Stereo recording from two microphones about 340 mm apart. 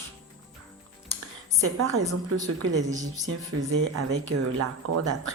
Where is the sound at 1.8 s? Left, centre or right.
Right.